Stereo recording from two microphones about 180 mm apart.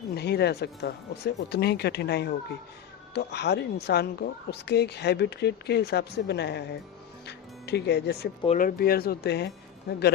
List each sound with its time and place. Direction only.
0.2 s a woman's voice: 65° left (ahead or behind)
7.3 s music: 65° left (ahead or behind)
8.4 s speech: 50° left (ahead or behind); by 9.5 s 65° left (ahead or behind)